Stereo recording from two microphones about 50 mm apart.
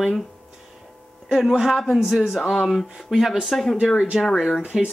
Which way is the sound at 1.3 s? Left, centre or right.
Centre.